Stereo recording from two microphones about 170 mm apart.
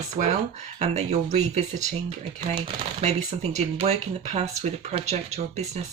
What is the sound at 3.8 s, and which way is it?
Speech, 40° right (ahead or behind).